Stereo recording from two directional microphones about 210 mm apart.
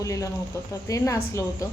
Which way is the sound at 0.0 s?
15° left (ahead or behind).